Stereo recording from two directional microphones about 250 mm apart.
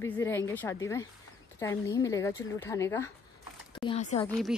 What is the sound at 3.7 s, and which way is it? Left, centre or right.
Speech, left.